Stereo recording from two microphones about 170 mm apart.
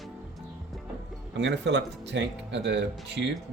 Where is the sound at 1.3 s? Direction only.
90° right.